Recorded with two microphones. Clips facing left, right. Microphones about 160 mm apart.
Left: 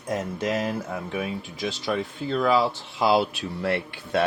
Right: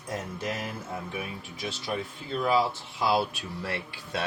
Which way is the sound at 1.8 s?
85° left.